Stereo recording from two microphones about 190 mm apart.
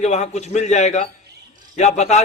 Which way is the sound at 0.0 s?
35° left (ahead or behind).